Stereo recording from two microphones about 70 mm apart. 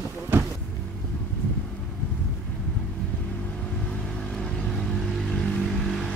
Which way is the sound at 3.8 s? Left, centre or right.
Centre.